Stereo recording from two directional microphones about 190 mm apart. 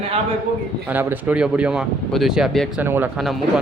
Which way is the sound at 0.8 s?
10° right (ahead or behind).